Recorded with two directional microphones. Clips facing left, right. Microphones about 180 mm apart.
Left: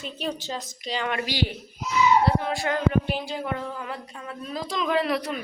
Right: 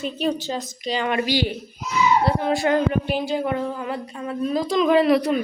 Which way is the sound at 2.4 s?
20° right (ahead or behind).